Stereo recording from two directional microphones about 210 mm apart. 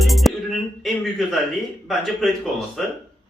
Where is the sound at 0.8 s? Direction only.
Centre (ahead or behind).